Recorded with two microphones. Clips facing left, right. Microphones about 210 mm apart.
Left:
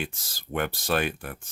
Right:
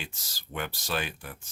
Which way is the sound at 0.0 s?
55° left (ahead or behind).